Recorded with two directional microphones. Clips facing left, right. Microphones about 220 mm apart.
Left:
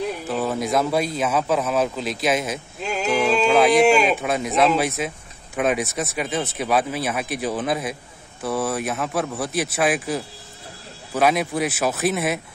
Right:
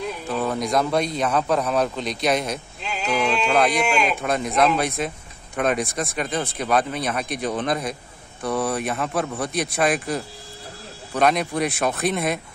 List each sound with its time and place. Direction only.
0.3 s a man's voice: 5° left (ahead or behind)
2.8 s a sound: 45° left (ahead or behind)
3.1 s a man's voice: 5° left (ahead or behind)